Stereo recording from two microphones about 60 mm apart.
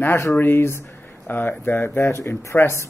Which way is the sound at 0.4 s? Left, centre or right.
Left.